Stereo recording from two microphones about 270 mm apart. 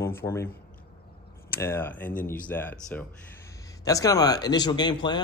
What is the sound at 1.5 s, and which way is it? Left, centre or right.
Speech, centre.